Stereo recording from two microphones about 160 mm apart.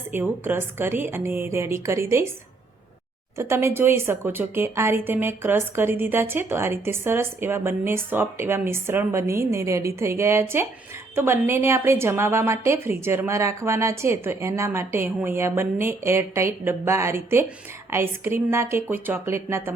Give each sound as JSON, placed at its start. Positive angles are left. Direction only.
{"t": 0.1, "sound": "a woman's voice", "side_deg": -10}
{"t": 3.3, "sound": "a woman's voice", "side_deg": -15}